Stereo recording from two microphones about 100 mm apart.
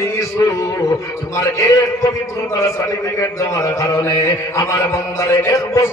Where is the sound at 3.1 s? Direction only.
35° left (ahead or behind).